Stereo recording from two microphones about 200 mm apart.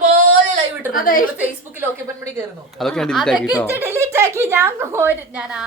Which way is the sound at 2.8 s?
5° left (ahead or behind).